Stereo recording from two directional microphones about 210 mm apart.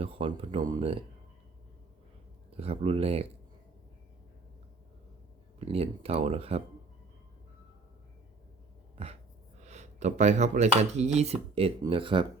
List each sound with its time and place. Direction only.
0.0 s speech: 25° right (ahead or behind)
2.5 s speech: 30° right (ahead or behind)
5.5 s speech: 30° right (ahead or behind)
9.6 s speech: 35° right (ahead or behind)